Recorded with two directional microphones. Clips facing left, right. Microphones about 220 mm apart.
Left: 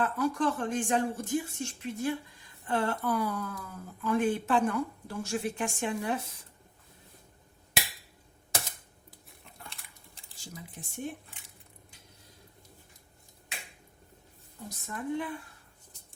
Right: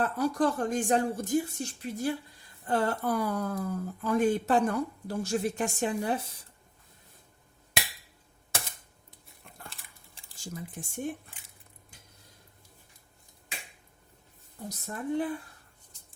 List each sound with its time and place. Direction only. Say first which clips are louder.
0.0 s speech: right 2 dB; 40° right (ahead or behind)
10.4 s speech: right 6 dB; 50° right (ahead or behind)
14.7 s speech: right 2 dB; 40° right (ahead or behind)